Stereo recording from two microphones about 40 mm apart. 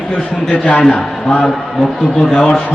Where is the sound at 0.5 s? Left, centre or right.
Left.